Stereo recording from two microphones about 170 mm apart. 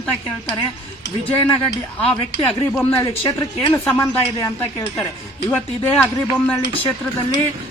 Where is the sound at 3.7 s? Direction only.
15° left (ahead or behind).